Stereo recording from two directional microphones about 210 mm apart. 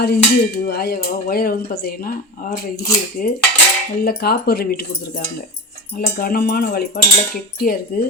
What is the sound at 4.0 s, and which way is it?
Speech, 45° left (ahead or behind).